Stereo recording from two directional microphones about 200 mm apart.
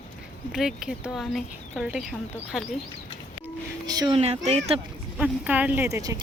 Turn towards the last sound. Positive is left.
turn(degrees=-15)  # may be behind; listen again after turning